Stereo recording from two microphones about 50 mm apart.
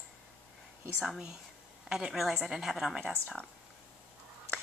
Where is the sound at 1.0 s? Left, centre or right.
Centre.